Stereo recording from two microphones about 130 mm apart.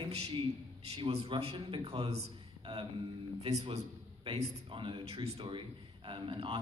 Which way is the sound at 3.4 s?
50° right (ahead or behind).